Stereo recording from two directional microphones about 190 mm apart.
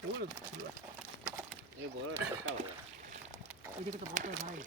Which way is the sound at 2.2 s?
80° right.